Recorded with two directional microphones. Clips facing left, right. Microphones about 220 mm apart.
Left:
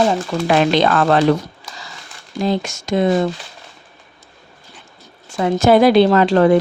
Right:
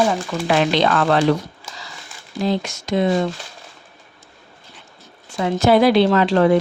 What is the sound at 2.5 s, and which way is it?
Speech, 45° left (ahead or behind).